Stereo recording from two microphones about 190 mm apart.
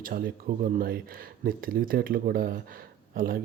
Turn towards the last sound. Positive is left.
turn(degrees=-50)  # may be behind; listen again after turning